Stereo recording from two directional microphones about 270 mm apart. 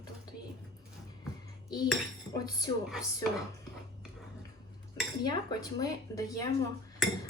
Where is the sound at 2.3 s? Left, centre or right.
Centre.